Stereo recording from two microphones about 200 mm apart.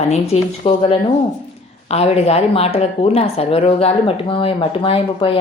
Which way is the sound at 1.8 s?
30° left (ahead or behind).